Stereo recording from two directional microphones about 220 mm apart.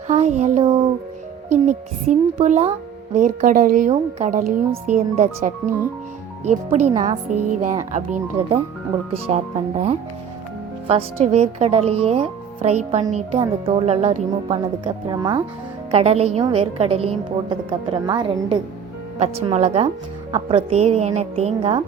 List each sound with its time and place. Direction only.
0.1 s a woman's voice: 30° right (ahead or behind)
6.9 s speech: 20° right (ahead or behind)
7.3 s music: 90° right
7.9 s a woman's voice: 35° right (ahead or behind)